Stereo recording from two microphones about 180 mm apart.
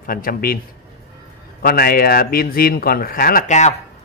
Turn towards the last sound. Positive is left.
turn(degrees=40)  # may be behind; listen again after turning